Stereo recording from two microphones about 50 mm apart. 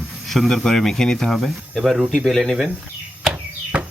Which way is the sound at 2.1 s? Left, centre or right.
Centre.